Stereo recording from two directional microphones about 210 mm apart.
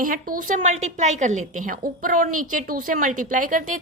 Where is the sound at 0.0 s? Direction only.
40° right (ahead or behind).